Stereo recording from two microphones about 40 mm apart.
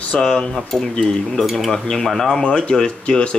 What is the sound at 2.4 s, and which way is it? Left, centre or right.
Speech, left.